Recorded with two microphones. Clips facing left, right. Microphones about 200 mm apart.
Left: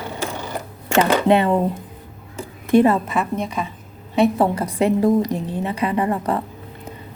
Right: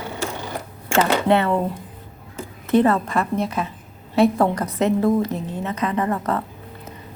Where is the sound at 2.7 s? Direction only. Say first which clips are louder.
Left 2 dB; 10° left (ahead or behind).